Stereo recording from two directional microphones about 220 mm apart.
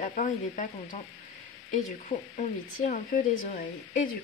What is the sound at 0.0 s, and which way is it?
Speech, 35° left (ahead or behind).